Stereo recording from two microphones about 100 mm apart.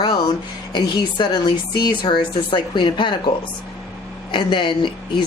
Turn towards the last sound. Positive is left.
turn(degrees=50)  # may be behind; listen again after turning